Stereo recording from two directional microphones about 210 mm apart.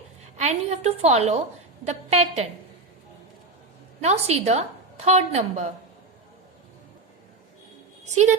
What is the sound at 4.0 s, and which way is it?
A woman's voice, 30° right (ahead or behind).